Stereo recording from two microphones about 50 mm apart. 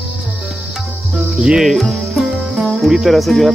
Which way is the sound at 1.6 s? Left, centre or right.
Centre.